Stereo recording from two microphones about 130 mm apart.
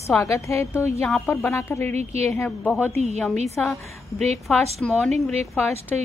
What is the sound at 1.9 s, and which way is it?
Speech, 55° right (ahead or behind).